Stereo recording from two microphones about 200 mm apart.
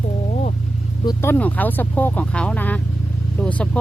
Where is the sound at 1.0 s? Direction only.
15° left (ahead or behind).